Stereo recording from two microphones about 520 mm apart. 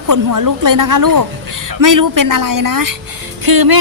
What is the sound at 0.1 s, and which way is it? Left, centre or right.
Speech, right.